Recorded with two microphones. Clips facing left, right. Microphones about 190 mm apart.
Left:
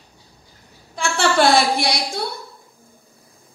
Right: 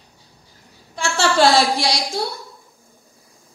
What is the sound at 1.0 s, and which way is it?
A woman's voice, 55° left (ahead or behind).